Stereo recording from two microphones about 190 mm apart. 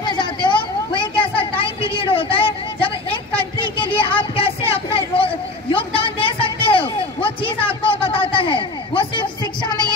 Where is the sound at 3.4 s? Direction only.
25° left (ahead or behind).